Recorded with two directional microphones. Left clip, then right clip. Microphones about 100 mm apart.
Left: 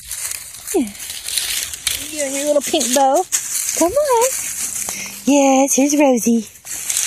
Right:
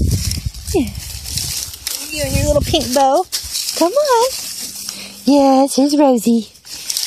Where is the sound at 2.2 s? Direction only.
5° right (ahead or behind).